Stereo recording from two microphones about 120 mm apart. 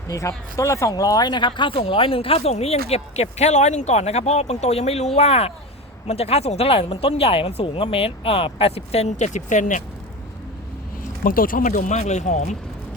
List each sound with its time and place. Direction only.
0.1 s speech: 25° left (ahead or behind); by 9.8 s 90° left
11.2 s speech: 90° left